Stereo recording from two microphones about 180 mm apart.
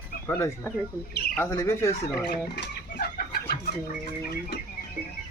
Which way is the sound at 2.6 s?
60° left (ahead or behind).